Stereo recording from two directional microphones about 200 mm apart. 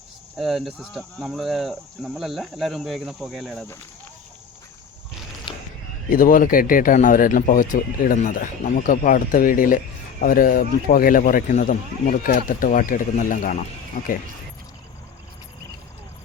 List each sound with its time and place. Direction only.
0.3 s speech: centre (ahead or behind)
5.5 s a sound: 25° left (ahead or behind)
6.1 s a man's voice: 45° left (ahead or behind)